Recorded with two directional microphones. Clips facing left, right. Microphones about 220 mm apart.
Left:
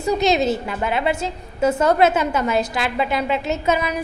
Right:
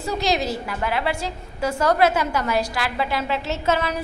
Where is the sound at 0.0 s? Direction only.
20° left (ahead or behind).